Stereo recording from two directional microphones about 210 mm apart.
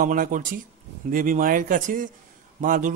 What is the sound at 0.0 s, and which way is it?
Speech, 40° right (ahead or behind).